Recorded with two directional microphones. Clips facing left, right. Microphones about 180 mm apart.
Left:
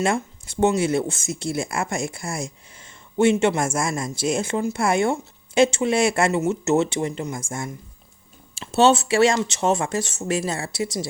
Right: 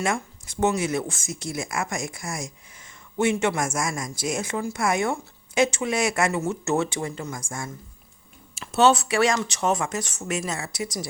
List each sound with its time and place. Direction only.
0.0 s speech: 30° left (ahead or behind)